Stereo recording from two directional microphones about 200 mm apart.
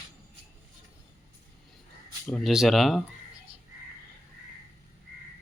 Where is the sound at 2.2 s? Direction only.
Centre (ahead or behind).